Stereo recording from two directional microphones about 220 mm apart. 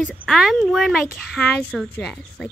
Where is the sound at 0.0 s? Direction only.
5° left (ahead or behind).